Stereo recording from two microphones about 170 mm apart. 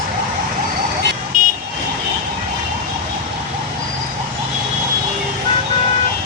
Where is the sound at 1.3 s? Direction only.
55° right (ahead or behind).